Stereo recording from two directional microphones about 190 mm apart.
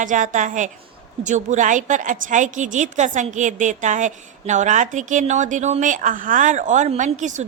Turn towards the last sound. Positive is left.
turn(degrees=-40)  # may be behind; listen again after turning